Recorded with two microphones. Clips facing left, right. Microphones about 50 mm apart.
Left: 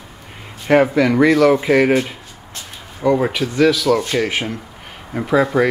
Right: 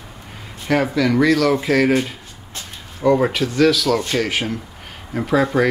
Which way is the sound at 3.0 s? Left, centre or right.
Centre.